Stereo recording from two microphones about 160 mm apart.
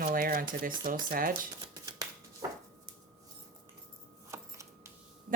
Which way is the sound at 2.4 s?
25° right (ahead or behind).